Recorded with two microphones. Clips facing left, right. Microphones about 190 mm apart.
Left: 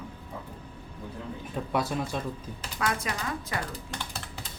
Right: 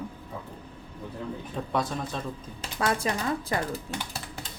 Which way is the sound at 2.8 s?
30° right (ahead or behind).